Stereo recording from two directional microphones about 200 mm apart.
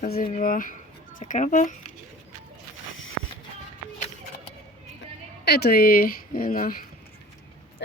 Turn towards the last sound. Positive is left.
turn(degrees=45)  # may be behind; listen again after turning